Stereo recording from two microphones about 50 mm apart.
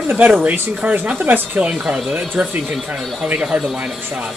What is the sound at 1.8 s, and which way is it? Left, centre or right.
Speech, centre.